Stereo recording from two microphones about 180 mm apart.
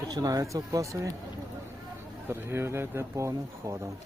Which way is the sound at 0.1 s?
20° right (ahead or behind).